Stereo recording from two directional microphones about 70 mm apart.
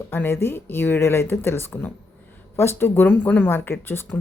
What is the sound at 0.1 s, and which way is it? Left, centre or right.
Speech, left.